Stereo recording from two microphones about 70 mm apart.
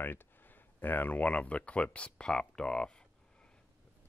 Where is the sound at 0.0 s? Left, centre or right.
Left; by 2.9 s centre.